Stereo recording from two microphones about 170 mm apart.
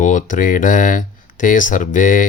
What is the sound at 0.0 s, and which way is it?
Speech, 45° left (ahead or behind).